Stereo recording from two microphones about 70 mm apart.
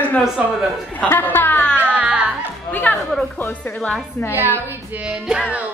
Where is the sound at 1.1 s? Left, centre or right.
Left.